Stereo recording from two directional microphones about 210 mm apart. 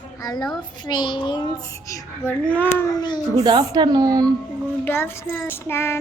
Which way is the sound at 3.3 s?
20° right (ahead or behind).